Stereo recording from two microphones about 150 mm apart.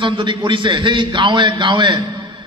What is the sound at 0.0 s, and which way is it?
A man's voice, 35° right (ahead or behind).